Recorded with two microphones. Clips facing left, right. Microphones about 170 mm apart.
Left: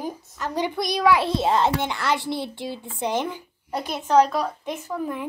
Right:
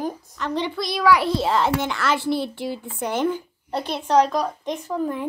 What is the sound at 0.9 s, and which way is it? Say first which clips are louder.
A child's voice: right 2 dB; 20° left (ahead or behind).